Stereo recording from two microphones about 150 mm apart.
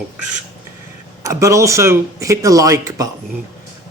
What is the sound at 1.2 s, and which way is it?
Speech, 20° right (ahead or behind).